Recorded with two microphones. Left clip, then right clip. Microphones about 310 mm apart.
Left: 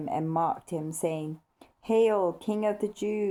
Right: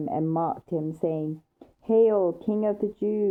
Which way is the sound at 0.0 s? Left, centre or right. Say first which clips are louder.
Right 1 dB; centre.